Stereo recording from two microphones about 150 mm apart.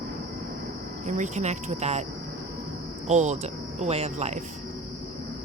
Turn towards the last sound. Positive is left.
turn(degrees=-50)  # may be behind; listen again after turning